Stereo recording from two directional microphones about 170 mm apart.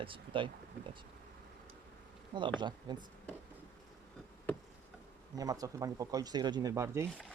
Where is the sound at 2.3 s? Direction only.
25° right (ahead or behind).